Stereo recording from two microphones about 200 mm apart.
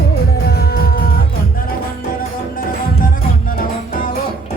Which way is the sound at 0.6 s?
50° left (ahead or behind).